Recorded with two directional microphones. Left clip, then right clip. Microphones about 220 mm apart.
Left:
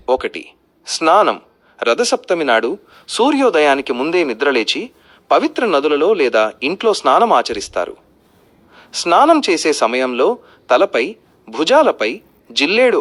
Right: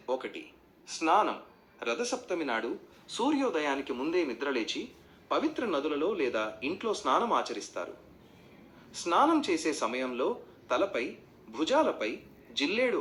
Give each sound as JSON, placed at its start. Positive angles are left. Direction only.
{"t": 0.0, "sound": "a man's voice", "side_deg": 45}